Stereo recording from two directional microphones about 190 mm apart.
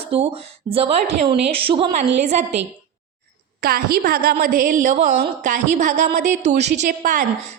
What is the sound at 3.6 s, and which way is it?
A woman's voice, 50° right (ahead or behind).